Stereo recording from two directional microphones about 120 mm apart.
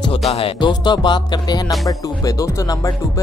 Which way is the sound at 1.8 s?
30° left (ahead or behind).